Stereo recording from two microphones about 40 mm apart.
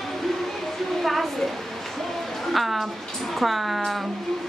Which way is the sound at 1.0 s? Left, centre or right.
Centre.